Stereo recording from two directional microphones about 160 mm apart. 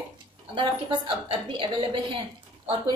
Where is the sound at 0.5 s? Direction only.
30° right (ahead or behind).